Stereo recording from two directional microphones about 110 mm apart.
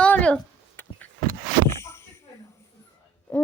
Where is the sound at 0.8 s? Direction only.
15° left (ahead or behind).